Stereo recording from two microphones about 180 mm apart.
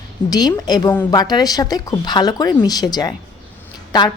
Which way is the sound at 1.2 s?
20° left (ahead or behind).